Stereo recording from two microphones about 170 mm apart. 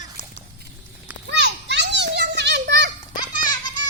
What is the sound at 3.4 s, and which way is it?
Music, 25° left (ahead or behind).